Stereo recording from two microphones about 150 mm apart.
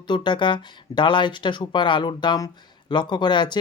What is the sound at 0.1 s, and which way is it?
Speech, 30° left (ahead or behind).